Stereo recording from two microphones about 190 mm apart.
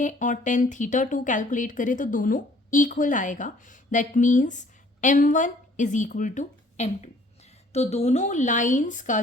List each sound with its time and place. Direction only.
0.0 s a woman's voice: 40° left (ahead or behind)